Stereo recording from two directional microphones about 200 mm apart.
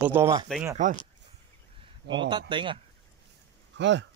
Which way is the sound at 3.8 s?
65° right (ahead or behind).